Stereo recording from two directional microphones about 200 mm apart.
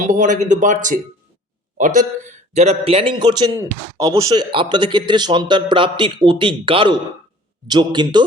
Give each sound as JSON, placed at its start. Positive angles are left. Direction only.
{"t": 0.0, "sound": "a man's voice", "side_deg": -40}